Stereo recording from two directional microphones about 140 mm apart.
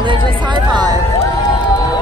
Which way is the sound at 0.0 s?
35° right (ahead or behind).